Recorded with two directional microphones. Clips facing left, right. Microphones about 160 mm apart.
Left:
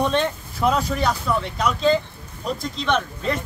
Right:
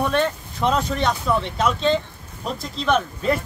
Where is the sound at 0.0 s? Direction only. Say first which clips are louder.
Even; 20° left (ahead or behind).